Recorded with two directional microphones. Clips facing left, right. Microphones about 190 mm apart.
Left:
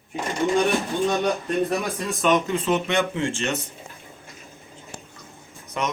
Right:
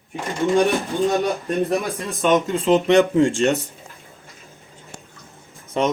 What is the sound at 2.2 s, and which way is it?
Speech, 30° right (ahead or behind).